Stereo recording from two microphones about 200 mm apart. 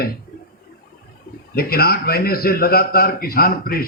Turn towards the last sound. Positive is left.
turn(degrees=50)  # may be behind; listen again after turning